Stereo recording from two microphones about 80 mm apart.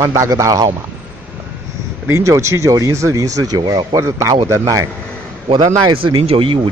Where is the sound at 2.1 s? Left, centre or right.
Right.